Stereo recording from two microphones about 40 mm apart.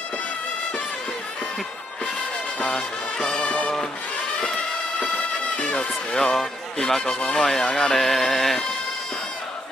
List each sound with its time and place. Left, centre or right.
2.6 s music: centre
5.7 s speech: centre
7.9 s music: centre